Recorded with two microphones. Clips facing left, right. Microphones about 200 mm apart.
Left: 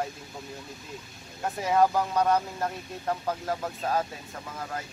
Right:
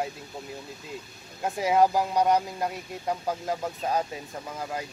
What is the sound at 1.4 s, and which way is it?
Speech, 15° right (ahead or behind).